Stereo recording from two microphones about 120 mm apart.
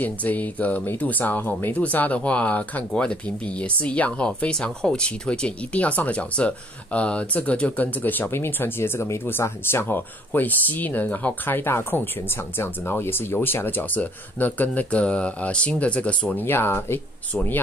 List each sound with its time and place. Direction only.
0.0 s speech: 15° left (ahead or behind)